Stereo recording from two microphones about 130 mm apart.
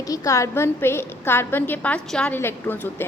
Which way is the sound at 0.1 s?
25° left (ahead or behind).